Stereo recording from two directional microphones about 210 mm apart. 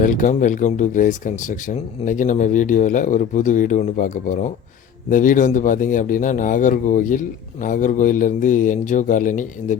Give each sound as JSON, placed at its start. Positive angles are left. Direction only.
{"t": 0.0, "sound": "speech", "side_deg": 40}